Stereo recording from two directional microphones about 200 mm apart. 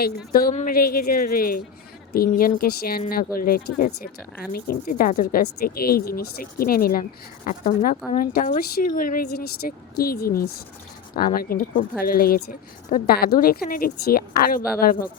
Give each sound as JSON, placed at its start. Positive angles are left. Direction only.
{"t": 0.3, "sound": "speech", "side_deg": 45}